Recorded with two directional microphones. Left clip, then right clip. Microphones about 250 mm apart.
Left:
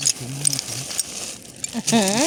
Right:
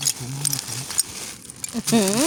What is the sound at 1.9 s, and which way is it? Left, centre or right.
Speech, right.